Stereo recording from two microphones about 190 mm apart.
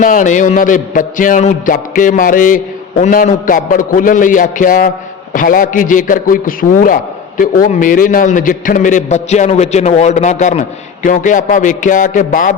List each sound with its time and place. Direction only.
0.0 s a man's voice: 45° left (ahead or behind)